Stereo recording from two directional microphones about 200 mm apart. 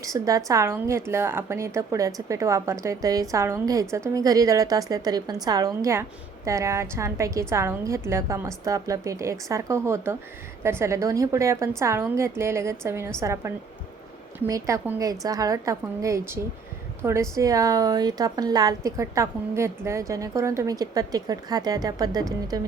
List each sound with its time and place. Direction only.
0.0 s a woman's voice: 15° right (ahead or behind)